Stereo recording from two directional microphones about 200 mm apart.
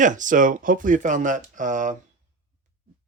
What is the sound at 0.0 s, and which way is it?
Speech, 40° right (ahead or behind).